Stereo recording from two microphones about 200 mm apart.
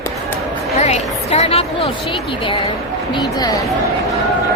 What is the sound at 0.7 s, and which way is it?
A woman's voice, 35° left (ahead or behind).